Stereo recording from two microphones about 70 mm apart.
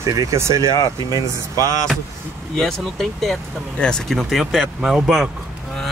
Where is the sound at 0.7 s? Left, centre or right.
Left.